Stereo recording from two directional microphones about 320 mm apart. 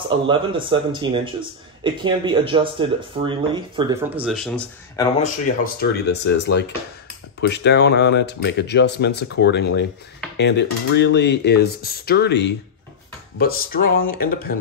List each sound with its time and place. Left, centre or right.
0.1 s speech: centre
5.2 s speech: left